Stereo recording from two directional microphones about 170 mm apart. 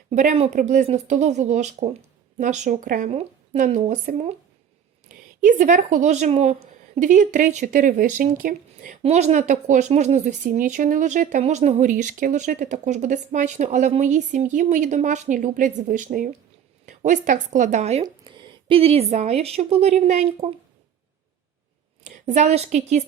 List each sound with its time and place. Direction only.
0.1 s speech: 45° right (ahead or behind)
3.1 s speech: 40° right (ahead or behind); by 9.0 s 55° right (ahead or behind)
9.0 s speech: 40° right (ahead or behind)
18.0 s speech: 30° right (ahead or behind)
22.0 s a woman's voice: 45° right (ahead or behind)